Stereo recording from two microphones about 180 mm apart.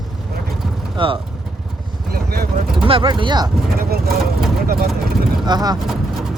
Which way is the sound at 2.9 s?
30° right (ahead or behind).